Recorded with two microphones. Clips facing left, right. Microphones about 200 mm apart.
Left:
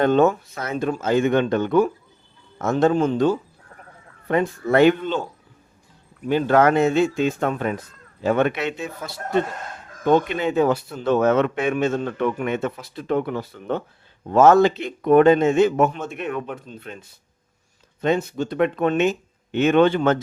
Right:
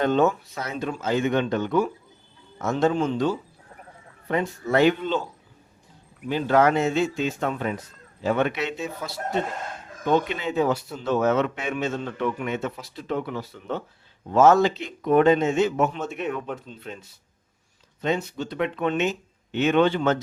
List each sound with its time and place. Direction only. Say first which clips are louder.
0.0 s a man's voice: left 4 dB; 50° left (ahead or behind)
6.2 s a man's voice: left 3 dB; 55° left (ahead or behind)